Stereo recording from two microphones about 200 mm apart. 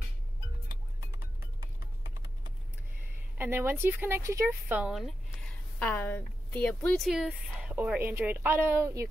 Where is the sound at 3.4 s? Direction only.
10° right (ahead or behind).